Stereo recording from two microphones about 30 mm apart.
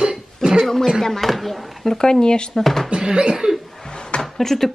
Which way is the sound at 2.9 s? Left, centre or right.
Right.